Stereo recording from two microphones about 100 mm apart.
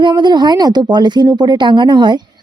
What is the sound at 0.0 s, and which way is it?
Speech, 50° right (ahead or behind).